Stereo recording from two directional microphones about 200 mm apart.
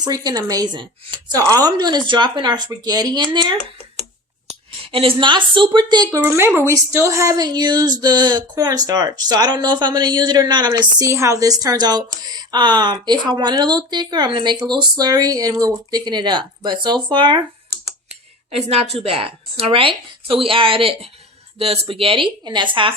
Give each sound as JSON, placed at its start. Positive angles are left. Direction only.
{"t": 0.0, "sound": "speech", "side_deg": -20}
{"t": 4.9, "sound": "speech", "side_deg": -25}
{"t": 18.5, "sound": "speech", "side_deg": -30}